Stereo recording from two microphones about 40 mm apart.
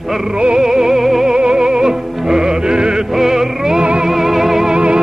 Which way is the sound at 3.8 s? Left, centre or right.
Right.